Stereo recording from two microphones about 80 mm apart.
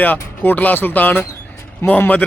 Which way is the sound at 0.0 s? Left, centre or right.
Left.